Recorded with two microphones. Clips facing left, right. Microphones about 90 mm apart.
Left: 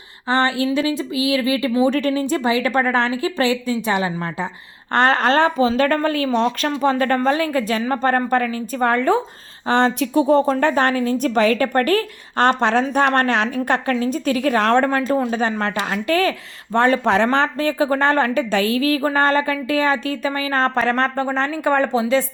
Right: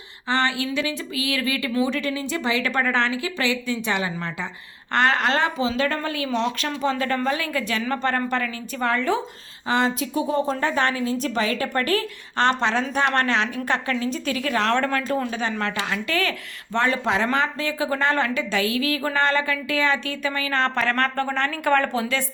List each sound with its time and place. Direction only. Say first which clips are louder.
0.3 s a woman's voice: left 5 dB; 35° left (ahead or behind)
1.9 s a woman's voice: left 7 dB; 45° left (ahead or behind)
7.3 s a woman's voice: left 6 dB; 35° left (ahead or behind)
9.6 s speech: left 5 dB; 55° left (ahead or behind)
10.8 s a woman's voice: left 5 dB; 45° left (ahead or behind)
14.8 s speech: left 5 dB; 30° left (ahead or behind)
15.3 s a woman's voice: left 5 dB; 40° left (ahead or behind)
17.0 s a woman's voice: left 5 dB; 60° left (ahead or behind); by 22.3 s 30° left (ahead or behind)